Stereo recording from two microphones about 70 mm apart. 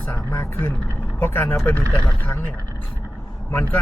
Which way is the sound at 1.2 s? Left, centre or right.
Left.